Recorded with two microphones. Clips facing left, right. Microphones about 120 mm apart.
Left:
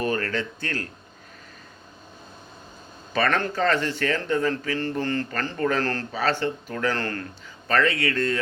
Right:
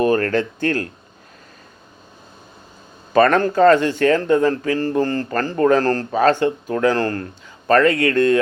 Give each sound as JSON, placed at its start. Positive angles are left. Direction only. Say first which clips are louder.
{"t": 0.0, "sound": "speech", "louder": "right 9 dB", "side_deg": -45}
{"t": 3.1, "sound": "speech", "louder": "right 9 dB", "side_deg": -40}